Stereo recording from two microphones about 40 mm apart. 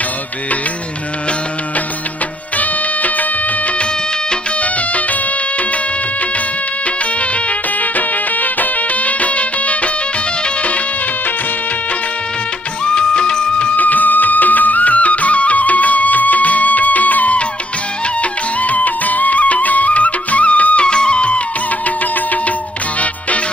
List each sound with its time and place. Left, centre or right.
2.6 s music of bollywood: left
7.8 s music: left
12.8 s music: left
13.7 s music: left
20.8 s music: left
21.8 s music: left